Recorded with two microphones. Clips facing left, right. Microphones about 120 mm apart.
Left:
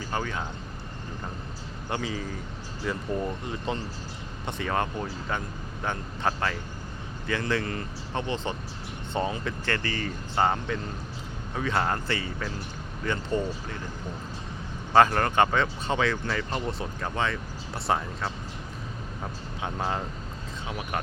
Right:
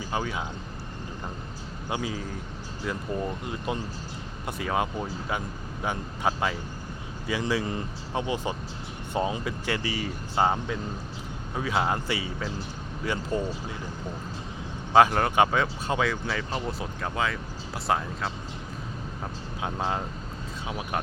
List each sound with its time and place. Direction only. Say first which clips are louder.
0.0 s speech: right 1 dB; 10° right (ahead or behind)
1.9 s speech: even; 5° right (ahead or behind)
14.9 s speech: right 1 dB; 5° right (ahead or behind)
19.8 s speech: even; 5° right (ahead or behind)
20.7 s speech: right 1 dB; 15° right (ahead or behind)